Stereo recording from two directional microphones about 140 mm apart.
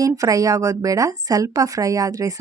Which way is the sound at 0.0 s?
25° right (ahead or behind).